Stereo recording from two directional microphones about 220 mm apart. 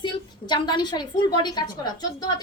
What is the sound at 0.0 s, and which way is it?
A woman's voice, 20° left (ahead or behind).